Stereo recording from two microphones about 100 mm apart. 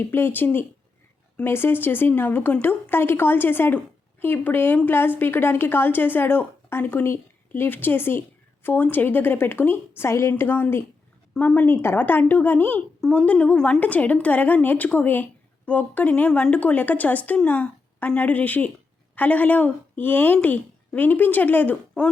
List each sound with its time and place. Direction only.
0.0 s a woman's voice: 25° left (ahead or behind)